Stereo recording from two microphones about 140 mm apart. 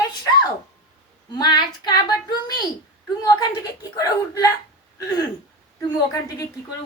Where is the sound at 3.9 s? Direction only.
25° left (ahead or behind).